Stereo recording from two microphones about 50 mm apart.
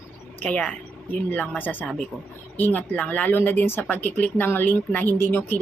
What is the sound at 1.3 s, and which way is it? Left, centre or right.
Speech, left.